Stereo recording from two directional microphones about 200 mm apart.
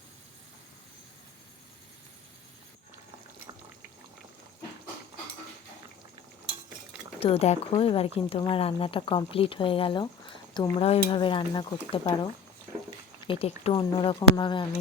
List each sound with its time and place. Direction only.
7.2 s speech: 30° left (ahead or behind)